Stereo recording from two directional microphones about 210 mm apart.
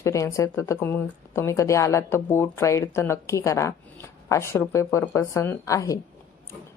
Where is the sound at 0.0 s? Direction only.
15° left (ahead or behind).